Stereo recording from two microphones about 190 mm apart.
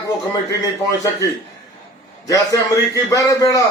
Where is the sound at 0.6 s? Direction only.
15° left (ahead or behind).